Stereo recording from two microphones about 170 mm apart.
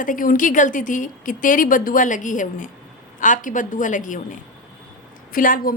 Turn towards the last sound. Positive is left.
turn(degrees=55)  # may be behind; listen again after turning